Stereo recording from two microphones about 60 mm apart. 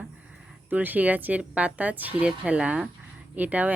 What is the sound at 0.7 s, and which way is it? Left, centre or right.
Speech, right.